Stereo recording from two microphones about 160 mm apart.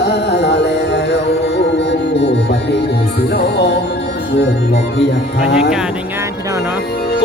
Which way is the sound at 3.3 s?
90° left.